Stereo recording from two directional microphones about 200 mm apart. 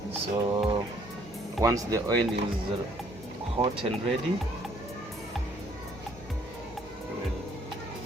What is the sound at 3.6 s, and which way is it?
Speech, 35° right (ahead or behind).